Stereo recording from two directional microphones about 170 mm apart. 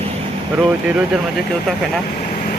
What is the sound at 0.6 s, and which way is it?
Speech, 5° right (ahead or behind).